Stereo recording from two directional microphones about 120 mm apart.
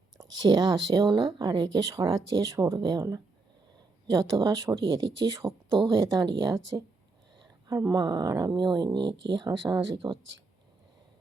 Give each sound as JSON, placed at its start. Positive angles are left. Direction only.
{"t": 0.2, "sound": "speech", "side_deg": -35}